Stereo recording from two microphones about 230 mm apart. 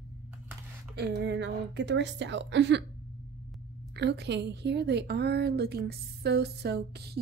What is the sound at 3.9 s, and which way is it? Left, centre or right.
A woman's voice, right.